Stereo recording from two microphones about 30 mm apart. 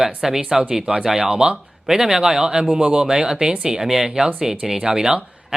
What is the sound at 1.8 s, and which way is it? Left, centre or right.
Speech, centre.